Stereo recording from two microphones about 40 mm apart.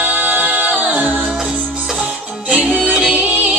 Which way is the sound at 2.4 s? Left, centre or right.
Right.